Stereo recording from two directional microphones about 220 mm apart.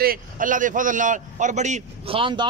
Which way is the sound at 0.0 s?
40° right (ahead or behind).